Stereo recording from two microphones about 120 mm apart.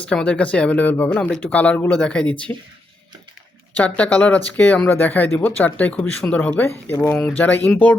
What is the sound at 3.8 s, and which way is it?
Speech, 10° left (ahead or behind).